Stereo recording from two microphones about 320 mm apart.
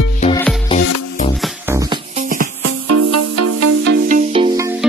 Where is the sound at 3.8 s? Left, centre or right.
Right; by 4.7 s centre.